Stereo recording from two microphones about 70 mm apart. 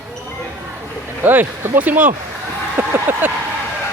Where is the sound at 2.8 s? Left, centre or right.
Right.